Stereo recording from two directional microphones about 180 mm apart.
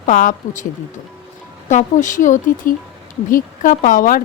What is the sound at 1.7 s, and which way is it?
Speech, 45° left (ahead or behind).